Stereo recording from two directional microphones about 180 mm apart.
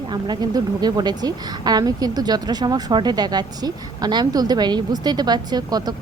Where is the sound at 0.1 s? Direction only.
25° right (ahead or behind).